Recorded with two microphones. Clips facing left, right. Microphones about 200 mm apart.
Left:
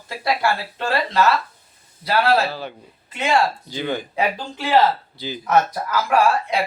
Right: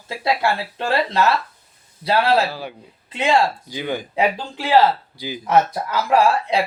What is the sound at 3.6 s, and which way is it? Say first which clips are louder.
Speech: even; 10° right (ahead or behind).